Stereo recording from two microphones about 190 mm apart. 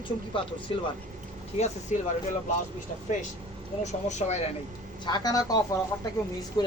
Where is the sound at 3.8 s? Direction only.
40° left (ahead or behind).